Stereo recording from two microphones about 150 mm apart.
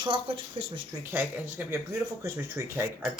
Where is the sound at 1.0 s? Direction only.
15° right (ahead or behind).